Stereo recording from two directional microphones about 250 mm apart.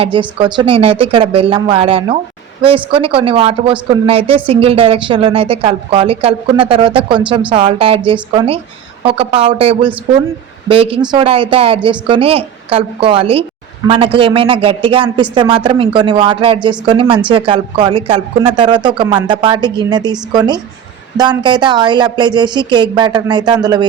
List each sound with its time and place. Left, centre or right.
0.0 s a woman's voice: centre